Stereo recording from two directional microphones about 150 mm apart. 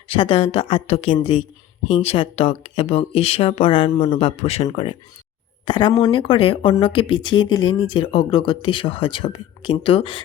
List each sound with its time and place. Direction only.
0.1 s speech: 40° left (ahead or behind)